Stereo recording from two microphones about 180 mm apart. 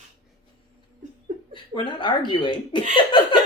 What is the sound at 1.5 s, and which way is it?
Speech, 25° left (ahead or behind).